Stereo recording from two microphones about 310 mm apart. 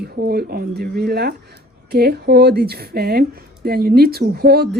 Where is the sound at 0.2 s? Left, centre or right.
Right.